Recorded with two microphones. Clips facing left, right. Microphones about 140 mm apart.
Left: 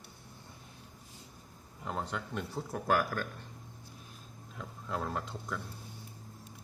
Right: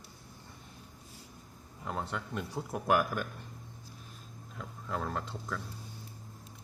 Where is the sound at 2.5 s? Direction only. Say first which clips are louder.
Right 2 dB; 15° right (ahead or behind).